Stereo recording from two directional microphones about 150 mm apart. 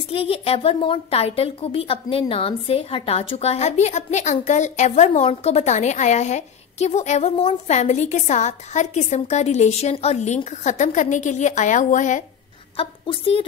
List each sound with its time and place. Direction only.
0.1 s a woman's voice: 40° left (ahead or behind); by 12.3 s 55° left (ahead or behind)
12.7 s a woman's voice: 35° left (ahead or behind)